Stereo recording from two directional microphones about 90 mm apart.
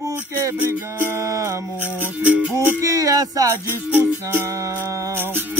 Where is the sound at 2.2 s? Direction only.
15° right (ahead or behind).